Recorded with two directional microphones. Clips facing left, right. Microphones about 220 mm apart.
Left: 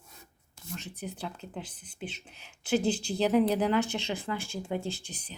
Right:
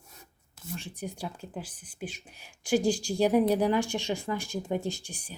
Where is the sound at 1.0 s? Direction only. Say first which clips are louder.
Right 1 dB; 10° right (ahead or behind).